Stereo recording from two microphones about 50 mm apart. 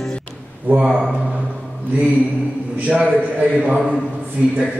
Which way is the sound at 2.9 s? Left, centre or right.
Right.